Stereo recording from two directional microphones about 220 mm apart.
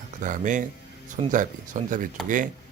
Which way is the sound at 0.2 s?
35° right (ahead or behind).